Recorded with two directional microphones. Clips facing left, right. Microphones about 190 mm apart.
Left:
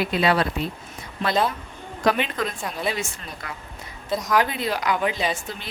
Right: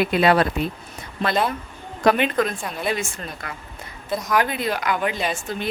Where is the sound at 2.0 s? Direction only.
55° right (ahead or behind).